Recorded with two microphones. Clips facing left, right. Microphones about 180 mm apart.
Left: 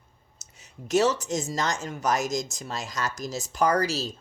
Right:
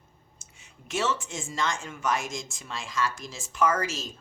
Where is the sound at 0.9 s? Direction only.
40° left (ahead or behind).